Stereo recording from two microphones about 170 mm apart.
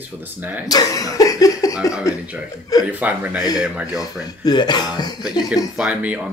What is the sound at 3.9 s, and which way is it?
Speech, 20° left (ahead or behind).